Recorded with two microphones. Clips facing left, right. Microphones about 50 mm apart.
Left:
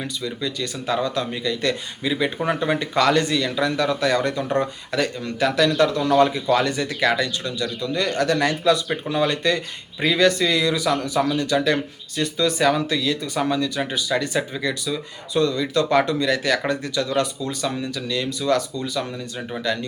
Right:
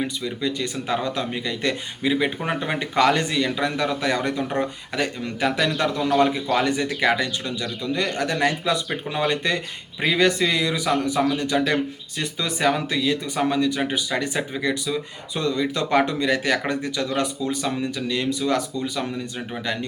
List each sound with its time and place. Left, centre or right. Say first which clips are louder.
0.0 s speech: right 2 dB; right